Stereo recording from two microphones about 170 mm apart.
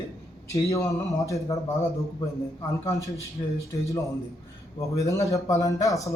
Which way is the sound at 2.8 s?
20° left (ahead or behind).